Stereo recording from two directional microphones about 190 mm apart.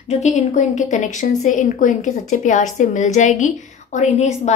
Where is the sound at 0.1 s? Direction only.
40° left (ahead or behind).